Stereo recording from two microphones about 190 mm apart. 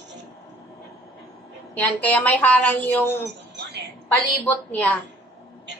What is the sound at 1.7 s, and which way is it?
Speech, 10° left (ahead or behind).